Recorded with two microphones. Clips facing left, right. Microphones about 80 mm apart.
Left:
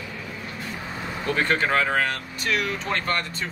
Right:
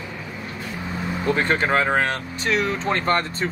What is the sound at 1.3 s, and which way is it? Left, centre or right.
Speech, right.